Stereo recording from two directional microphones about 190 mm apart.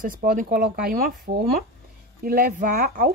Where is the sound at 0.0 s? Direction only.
45° right (ahead or behind).